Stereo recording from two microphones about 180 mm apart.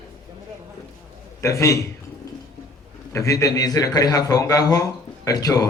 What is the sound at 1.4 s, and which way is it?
Speech, 15° left (ahead or behind).